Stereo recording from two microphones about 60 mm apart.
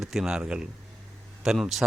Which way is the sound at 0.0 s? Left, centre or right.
Centre.